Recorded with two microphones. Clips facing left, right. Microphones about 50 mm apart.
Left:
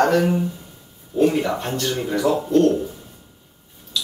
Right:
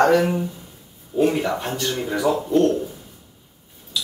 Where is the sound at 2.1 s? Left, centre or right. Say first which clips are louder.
Left 1 dB; centre.